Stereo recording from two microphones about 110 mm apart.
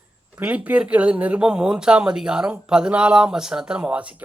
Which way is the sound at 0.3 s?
15° right (ahead or behind).